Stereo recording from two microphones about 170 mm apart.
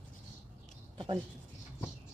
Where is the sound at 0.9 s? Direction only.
30° right (ahead or behind).